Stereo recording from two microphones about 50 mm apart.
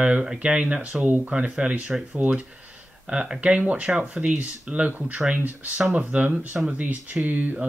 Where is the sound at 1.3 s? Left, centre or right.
Centre.